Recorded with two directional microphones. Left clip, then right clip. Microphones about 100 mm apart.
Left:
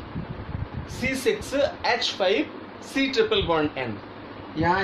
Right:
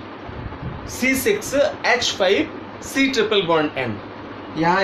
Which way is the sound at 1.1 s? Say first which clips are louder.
Right 4 dB; 30° left (ahead or behind).